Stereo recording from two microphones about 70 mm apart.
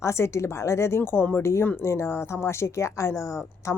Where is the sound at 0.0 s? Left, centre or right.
Left.